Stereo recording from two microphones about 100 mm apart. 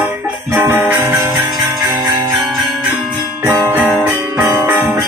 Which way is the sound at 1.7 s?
35° right (ahead or behind).